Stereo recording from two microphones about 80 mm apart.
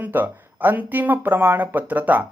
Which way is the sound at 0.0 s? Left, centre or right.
Right.